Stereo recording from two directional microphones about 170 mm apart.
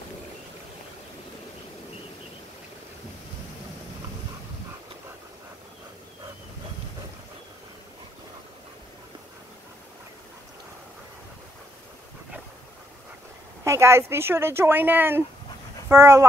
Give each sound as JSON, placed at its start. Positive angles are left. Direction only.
{"t": 13.7, "sound": "speech", "side_deg": -15}